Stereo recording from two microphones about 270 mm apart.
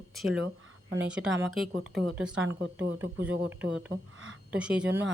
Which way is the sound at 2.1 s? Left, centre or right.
Centre.